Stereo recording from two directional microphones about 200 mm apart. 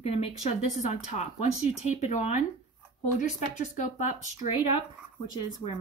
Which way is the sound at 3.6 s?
35° left (ahead or behind).